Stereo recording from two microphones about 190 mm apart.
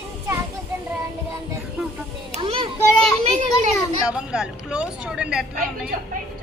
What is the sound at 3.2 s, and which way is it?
Children playing, 40° right (ahead or behind).